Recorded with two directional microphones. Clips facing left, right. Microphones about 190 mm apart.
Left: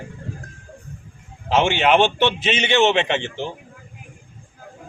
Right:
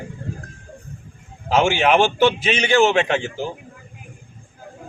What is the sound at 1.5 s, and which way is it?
A man's voice, centre (ahead or behind).